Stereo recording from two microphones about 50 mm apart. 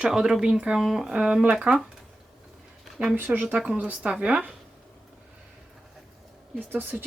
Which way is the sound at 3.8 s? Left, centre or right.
Right.